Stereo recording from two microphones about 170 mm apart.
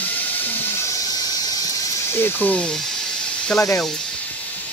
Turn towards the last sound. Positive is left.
turn(degrees=5)  # may be behind; listen again after turning